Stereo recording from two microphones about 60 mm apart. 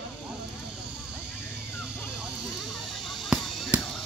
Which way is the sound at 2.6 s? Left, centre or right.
Centre.